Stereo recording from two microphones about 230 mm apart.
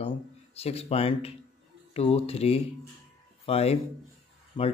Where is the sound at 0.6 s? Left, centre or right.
Left.